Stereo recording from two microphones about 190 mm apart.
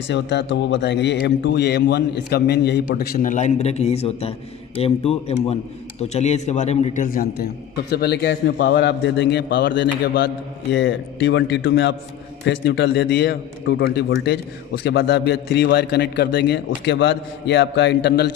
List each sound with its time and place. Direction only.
0.1 s a man's voice: 65° left (ahead or behind); by 7.3 s 45° left (ahead or behind)
7.9 s a man's voice: 55° left (ahead or behind)